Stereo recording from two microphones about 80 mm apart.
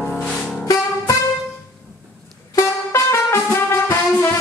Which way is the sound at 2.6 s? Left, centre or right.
Left.